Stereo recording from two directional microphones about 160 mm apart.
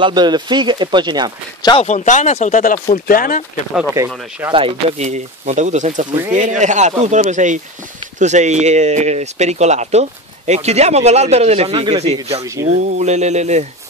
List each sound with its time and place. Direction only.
0.0 s speech: 25° right (ahead or behind)
1.8 s speech: 45° left (ahead or behind); by 3.4 s 65° left (ahead or behind)
4.0 s speech: 20° right (ahead or behind)
4.5 s speech: 35° right (ahead or behind)